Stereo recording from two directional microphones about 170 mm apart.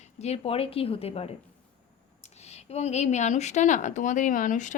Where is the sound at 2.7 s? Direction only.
40° left (ahead or behind).